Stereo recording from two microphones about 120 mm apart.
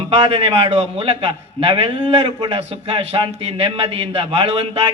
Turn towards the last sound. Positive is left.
turn(degrees=-55)  # may be behind; listen again after turning